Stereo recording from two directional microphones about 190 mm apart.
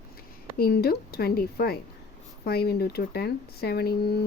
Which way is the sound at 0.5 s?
55° left (ahead or behind).